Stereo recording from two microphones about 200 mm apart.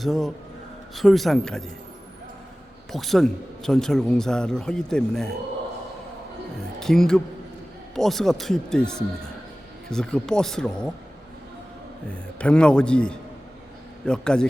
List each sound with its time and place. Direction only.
0.0 s speech: centre (ahead or behind)
2.9 s speech: centre (ahead or behind)
6.7 s a woman's voice: centre (ahead or behind)
12.0 s speech: 5° left (ahead or behind)